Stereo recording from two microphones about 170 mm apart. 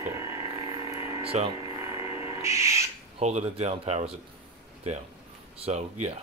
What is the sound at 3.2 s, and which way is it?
Speech, 40° right (ahead or behind).